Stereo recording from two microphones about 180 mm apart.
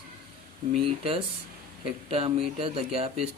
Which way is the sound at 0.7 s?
30° right (ahead or behind).